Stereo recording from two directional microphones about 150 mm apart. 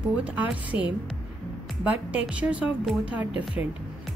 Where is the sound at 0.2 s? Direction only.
10° right (ahead or behind).